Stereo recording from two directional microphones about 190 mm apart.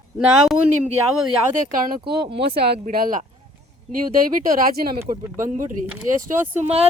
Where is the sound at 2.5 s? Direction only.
55° right (ahead or behind).